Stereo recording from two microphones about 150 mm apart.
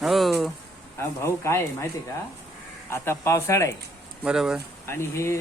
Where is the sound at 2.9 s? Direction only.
15° left (ahead or behind).